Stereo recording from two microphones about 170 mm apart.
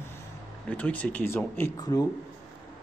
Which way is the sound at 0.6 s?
10° left (ahead or behind).